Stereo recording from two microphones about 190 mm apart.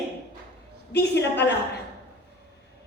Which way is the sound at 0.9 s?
60° left (ahead or behind).